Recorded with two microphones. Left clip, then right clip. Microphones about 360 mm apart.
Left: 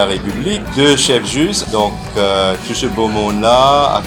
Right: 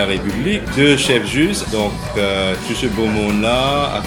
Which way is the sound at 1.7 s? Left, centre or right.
Left.